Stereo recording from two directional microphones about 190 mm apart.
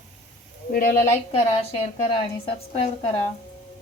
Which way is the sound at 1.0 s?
35° left (ahead or behind).